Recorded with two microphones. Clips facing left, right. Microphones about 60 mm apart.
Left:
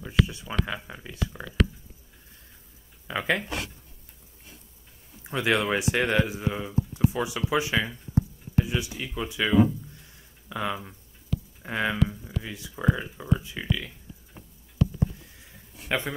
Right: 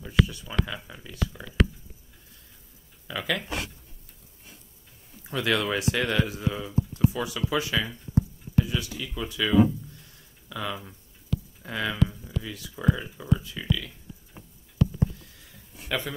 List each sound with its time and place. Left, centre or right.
0.0 s speech: left
3.1 s speech: left
5.2 s speech: left
15.9 s speech: left